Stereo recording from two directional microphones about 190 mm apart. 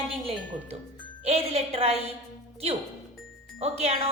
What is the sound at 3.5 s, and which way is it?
Speech, 35° right (ahead or behind).